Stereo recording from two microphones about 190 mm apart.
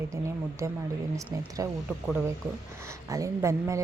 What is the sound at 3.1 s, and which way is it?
Speech, 15° right (ahead or behind).